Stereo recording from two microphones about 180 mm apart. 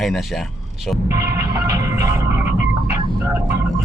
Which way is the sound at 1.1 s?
20° right (ahead or behind).